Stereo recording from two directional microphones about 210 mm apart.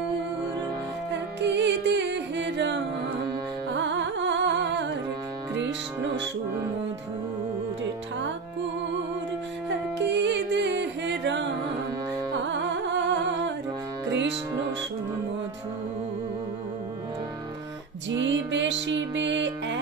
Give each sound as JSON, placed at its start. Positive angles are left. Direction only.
{"t": 1.4, "sound": "music", "side_deg": -55}
{"t": 9.7, "sound": "music", "side_deg": -55}
{"t": 12.4, "sound": "music", "side_deg": -60}
{"t": 18.1, "sound": "music", "side_deg": -60}